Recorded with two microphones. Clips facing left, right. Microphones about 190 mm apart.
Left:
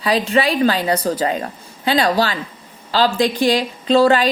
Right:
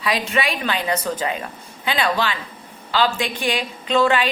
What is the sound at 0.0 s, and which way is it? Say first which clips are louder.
A woman's voice: left 5 dB; 35° left (ahead or behind).